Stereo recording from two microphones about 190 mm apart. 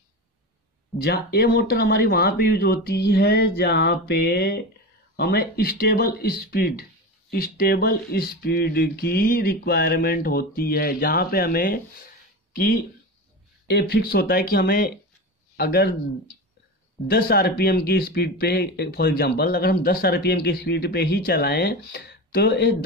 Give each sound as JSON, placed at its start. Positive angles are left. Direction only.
{"t": 1.0, "sound": "speech", "side_deg": 55}
{"t": 17.1, "sound": "speech", "side_deg": 55}